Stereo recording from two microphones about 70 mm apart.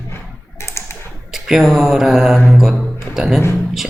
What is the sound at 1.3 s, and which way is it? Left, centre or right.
Speech, centre.